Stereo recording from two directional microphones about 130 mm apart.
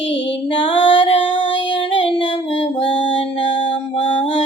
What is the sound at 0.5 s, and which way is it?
Female singing, 40° left (ahead or behind).